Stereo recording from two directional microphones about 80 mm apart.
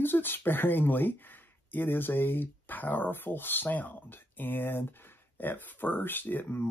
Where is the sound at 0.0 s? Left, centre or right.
Left.